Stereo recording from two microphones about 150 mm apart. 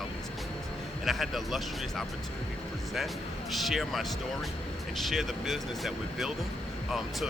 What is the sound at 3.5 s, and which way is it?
Speech, centre (ahead or behind).